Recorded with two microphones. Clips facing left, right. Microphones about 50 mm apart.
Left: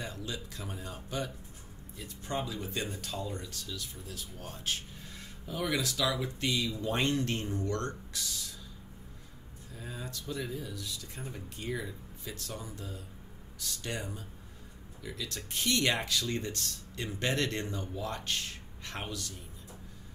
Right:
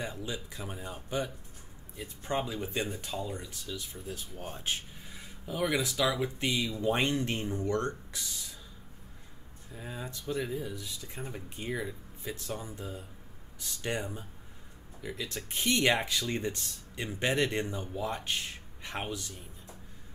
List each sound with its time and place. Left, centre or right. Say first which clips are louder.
0.0 s speech: right 2 dB; centre
9.8 s speech: right 2 dB; centre